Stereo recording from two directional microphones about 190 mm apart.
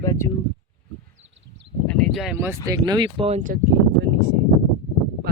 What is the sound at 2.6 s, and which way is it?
Speech, 20° right (ahead or behind).